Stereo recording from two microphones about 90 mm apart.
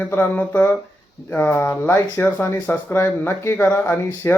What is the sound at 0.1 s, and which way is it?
Speech, 20° left (ahead or behind).